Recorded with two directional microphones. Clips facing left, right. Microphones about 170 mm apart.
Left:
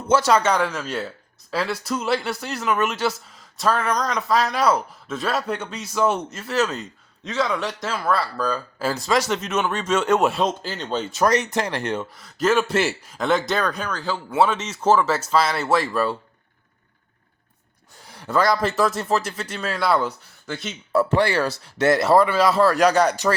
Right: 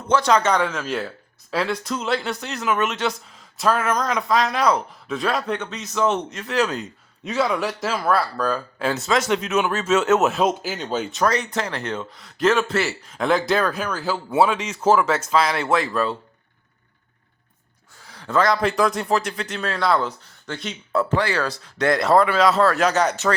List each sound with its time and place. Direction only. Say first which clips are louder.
0.1 s speech: even; 5° left (ahead or behind)
7.3 s speech: right 2 dB; 10° right (ahead or behind)
11.2 s speech: left 3 dB; 15° left (ahead or behind); by 15.0 s 5° right (ahead or behind)
15.0 s speech: even; 5° left (ahead or behind)
18.2 s speech: even; 10° left (ahead or behind)